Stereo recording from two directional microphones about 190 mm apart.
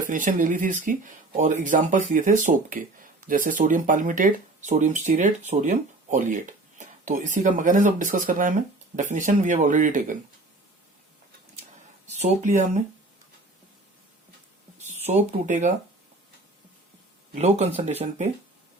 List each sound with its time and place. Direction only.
0.0 s speech: 45° right (ahead or behind)
12.0 s speech: 40° right (ahead or behind)
14.8 s speech: 35° right (ahead or behind)
17.3 s speech: 35° right (ahead or behind)